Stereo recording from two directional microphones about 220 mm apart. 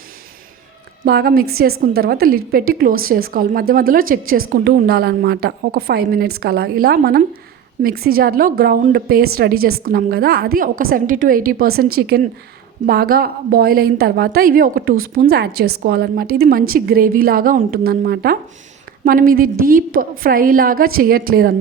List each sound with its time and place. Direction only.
1.0 s a woman's voice: 45° right (ahead or behind)